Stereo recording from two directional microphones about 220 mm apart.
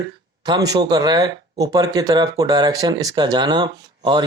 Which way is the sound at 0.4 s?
15° right (ahead or behind).